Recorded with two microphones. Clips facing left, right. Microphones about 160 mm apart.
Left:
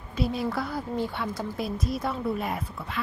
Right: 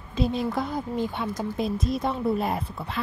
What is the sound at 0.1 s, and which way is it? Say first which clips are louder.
A woman's voice: right 2 dB; 20° right (ahead or behind).